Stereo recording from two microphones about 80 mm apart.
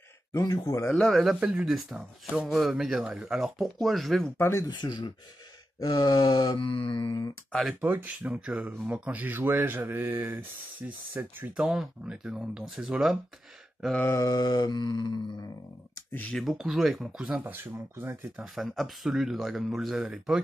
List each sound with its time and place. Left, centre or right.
0.3 s groan: left
0.8 s speech: centre
4.4 s speech: left
4.6 s speech: left
5.8 s groan: left
6.6 s mantra: left
7.8 s speech: right
14.1 s mantra: left
16.1 s speech: centre
16.3 s speech: centre
17.2 s speech: centre
17.5 s speech: right
18.5 s speech: centre